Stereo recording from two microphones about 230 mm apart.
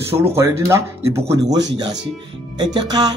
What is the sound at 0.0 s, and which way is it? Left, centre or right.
Speech, centre.